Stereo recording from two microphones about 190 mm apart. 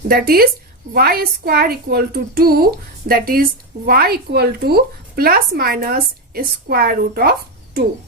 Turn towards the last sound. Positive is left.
turn(degrees=-55)  # may be behind; listen again after turning